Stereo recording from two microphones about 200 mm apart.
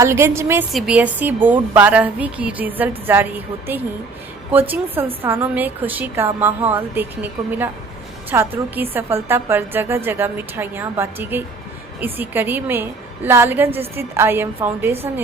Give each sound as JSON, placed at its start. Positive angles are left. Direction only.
{"t": 0.0, "sound": "a woman's voice", "side_deg": -15}
{"t": 0.7, "sound": "a woman's voice", "side_deg": 0}